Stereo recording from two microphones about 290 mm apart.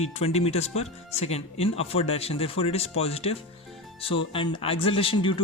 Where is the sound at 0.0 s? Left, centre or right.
Left.